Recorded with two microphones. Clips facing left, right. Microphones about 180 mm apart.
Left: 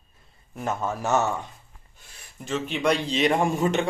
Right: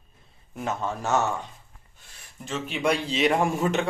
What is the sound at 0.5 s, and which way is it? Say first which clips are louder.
Speech: left 1 dB; centre (ahead or behind).